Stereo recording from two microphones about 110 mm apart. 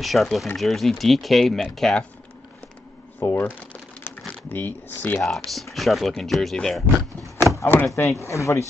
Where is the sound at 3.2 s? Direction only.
25° left (ahead or behind).